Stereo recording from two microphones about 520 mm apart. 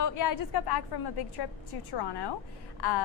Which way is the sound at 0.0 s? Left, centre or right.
Left.